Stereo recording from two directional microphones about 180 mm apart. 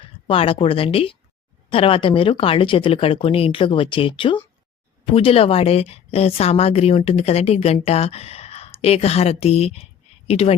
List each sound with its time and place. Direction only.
0.3 s a woman's voice: 30° left (ahead or behind)